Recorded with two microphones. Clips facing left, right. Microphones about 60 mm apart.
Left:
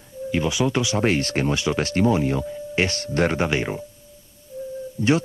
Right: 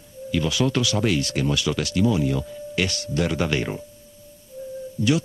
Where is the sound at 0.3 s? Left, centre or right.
Left.